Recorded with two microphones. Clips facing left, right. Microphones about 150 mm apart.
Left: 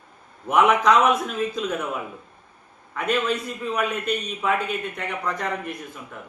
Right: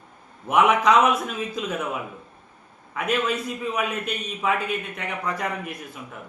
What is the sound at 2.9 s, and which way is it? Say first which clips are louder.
A man's voice: left 1 dB; 5° right (ahead or behind).